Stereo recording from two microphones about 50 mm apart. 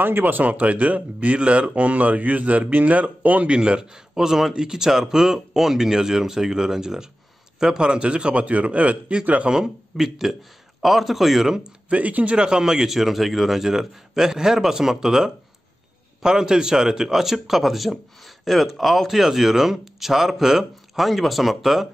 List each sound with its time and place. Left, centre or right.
0.0 s speech: right
3.5 s speech: centre
9.5 s speech: centre
11.9 s speech: right
12.4 s speech: centre